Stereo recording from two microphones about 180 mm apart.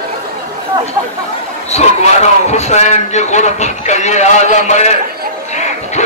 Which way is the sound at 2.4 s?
40° left (ahead or behind).